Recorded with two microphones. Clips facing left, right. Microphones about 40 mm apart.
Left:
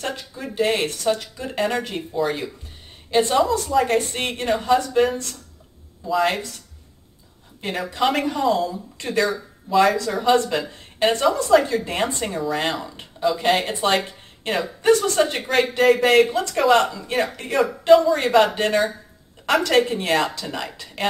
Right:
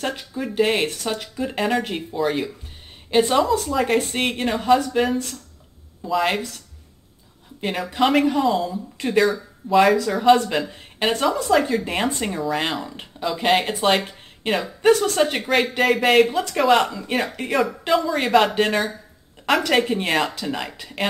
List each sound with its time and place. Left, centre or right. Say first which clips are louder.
0.2 s speech: right 3 dB; centre
2.1 s speech: right 1 dB; centre
3.1 s a woman's voice: right 1 dB; centre
7.6 s speech: right 1 dB; centre